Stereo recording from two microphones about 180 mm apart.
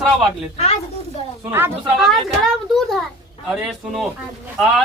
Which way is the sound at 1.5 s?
15° right (ahead or behind).